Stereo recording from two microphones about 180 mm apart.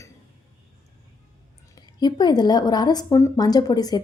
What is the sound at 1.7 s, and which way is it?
Speech, 25° left (ahead or behind).